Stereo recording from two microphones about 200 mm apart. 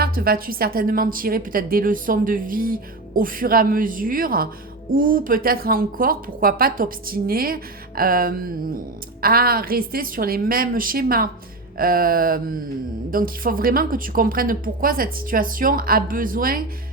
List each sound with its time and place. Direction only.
0.0 s speech: 45° right (ahead or behind)